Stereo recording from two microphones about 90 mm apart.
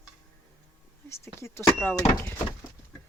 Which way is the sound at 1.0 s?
30° left (ahead or behind).